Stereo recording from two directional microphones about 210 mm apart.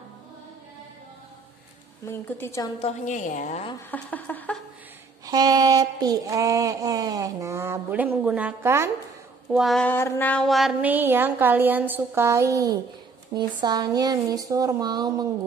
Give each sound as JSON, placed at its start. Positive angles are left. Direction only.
{"t": 2.0, "sound": "a woman's voice", "side_deg": 10}
{"t": 2.8, "sound": "a woman's voice", "side_deg": 35}
{"t": 3.9, "sound": "a woman's voice", "side_deg": 10}
{"t": 5.2, "sound": "a sound", "side_deg": -20}
{"t": 9.5, "sound": "a sound", "side_deg": 0}
{"t": 13.3, "sound": "speech", "side_deg": -20}